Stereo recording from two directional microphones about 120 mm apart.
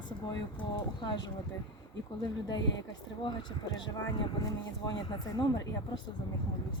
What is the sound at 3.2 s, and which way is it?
A woman's voice, 35° left (ahead or behind).